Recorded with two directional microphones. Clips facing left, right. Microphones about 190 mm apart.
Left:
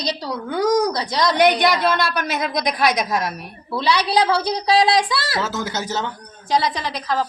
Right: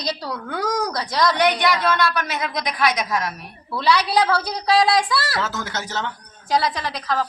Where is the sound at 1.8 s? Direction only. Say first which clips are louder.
Left 1 dB; 35° left (ahead or behind).